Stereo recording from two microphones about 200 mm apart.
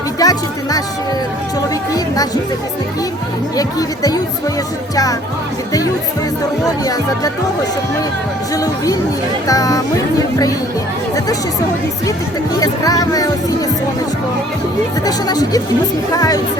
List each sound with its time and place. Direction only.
0.2 s speech: 20° left (ahead or behind)
1.9 s speech: 20° left (ahead or behind)
3.5 s speech: 20° left (ahead or behind)
6.8 s speech: 20° left (ahead or behind)
12.5 s speech: 20° left (ahead or behind)
15.0 s speech: 20° left (ahead or behind)